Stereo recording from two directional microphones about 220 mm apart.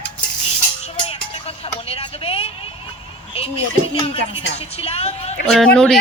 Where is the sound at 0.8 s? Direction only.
25° left (ahead or behind).